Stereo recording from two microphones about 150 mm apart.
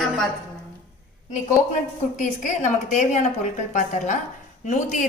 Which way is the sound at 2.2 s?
55° left (ahead or behind).